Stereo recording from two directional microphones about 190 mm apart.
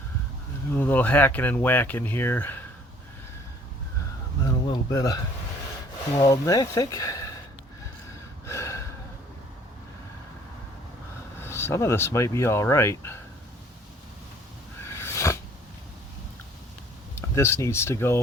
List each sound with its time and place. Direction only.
0.8 s speech: 10° left (ahead or behind)
4.6 s speech: 20° left (ahead or behind)
8.4 s snort: 15° left (ahead or behind)
11.3 s speech: 10° left (ahead or behind)
14.8 s a sound: 15° left (ahead or behind)
17.2 s speech: 15° left (ahead or behind)